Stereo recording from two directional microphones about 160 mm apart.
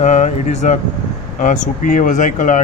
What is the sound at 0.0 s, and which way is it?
Speech, 50° left (ahead or behind).